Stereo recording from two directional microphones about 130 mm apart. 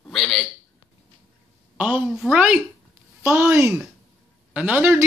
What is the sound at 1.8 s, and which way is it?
Speech, 10° right (ahead or behind).